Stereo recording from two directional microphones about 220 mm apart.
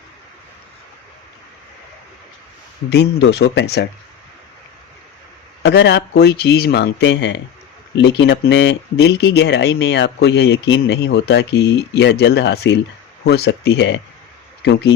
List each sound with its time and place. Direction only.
2.9 s speech: 50° left (ahead or behind)
5.6 s speech: 50° left (ahead or behind)